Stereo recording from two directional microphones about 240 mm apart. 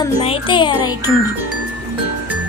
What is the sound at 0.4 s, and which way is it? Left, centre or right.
Speech, centre.